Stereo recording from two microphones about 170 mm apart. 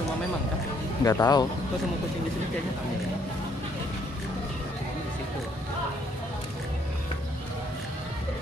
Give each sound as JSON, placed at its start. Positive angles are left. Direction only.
{"t": 1.0, "sound": "speech", "side_deg": 20}